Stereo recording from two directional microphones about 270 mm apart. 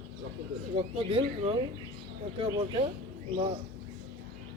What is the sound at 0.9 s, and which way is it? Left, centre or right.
Speech, right.